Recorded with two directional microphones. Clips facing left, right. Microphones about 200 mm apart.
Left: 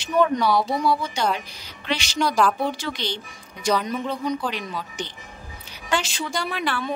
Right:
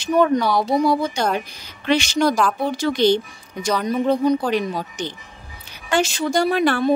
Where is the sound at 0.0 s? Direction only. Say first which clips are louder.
Right 3 dB; 45° right (ahead or behind).